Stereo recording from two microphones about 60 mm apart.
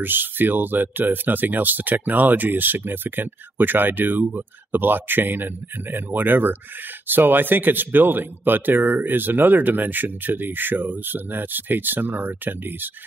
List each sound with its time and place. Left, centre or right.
0.0 s speech: right